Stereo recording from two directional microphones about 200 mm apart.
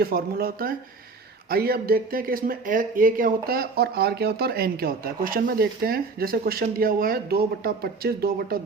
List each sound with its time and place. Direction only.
0.0 s speech: 50° right (ahead or behind)